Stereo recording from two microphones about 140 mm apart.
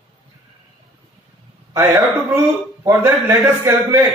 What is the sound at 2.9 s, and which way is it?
A man's voice, 20° right (ahead or behind).